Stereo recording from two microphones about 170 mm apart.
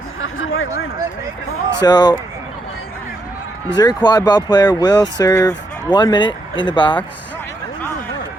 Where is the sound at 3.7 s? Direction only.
20° left (ahead or behind).